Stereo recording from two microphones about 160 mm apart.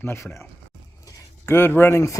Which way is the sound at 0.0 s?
15° left (ahead or behind).